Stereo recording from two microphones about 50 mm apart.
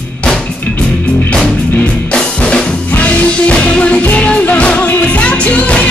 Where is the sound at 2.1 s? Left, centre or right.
Centre.